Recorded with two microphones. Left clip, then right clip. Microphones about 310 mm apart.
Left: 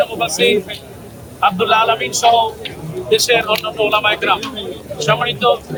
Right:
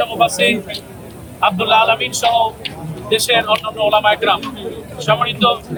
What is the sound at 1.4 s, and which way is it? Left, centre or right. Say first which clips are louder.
Speech: even; centre.